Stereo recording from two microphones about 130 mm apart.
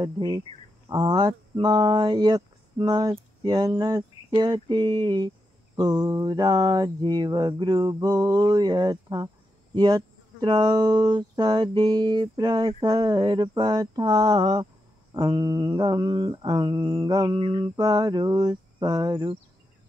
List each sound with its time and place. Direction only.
0.0 s cricket: 35° right (ahead or behind)